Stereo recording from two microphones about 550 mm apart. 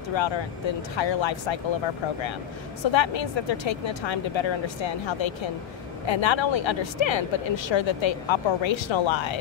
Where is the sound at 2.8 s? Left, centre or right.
Left.